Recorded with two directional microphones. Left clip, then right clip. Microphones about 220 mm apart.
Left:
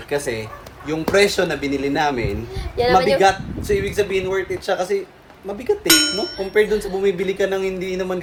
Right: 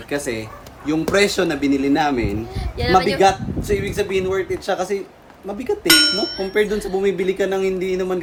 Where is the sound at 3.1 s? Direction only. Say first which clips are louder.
Even; 25° right (ahead or behind).